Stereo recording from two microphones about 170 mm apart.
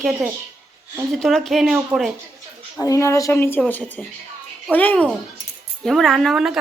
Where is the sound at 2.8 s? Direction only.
20° left (ahead or behind).